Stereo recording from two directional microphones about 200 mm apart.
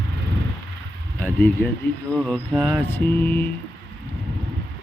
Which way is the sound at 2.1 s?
Centre (ahead or behind).